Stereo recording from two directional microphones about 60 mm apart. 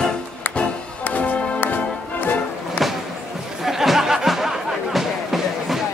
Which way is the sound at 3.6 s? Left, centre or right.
Centre.